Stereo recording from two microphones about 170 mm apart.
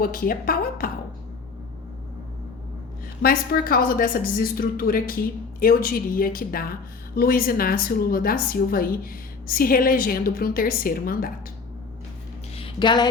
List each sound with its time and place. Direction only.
0.0 s a woman's voice: 55° left (ahead or behind)
3.2 s a woman's voice: 60° left (ahead or behind)
12.5 s a sound: 30° left (ahead or behind)